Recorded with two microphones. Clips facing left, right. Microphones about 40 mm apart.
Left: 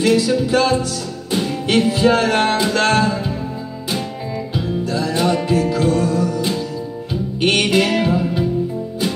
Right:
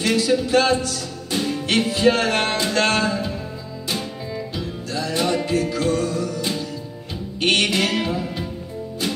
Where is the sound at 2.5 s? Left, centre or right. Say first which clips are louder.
Left 5 dB; centre.